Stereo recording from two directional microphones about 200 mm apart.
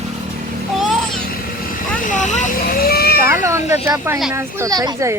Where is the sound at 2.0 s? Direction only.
40° left (ahead or behind).